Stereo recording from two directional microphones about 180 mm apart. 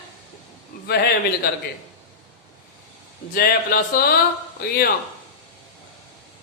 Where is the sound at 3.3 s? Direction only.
55° left (ahead or behind).